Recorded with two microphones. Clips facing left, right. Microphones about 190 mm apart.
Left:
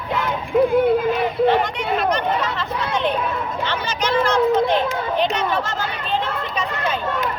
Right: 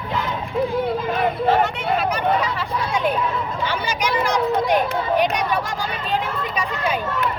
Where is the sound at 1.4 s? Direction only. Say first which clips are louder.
Even; 5° right (ahead or behind).